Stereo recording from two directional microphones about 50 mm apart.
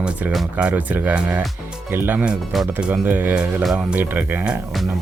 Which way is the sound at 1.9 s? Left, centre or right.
Right.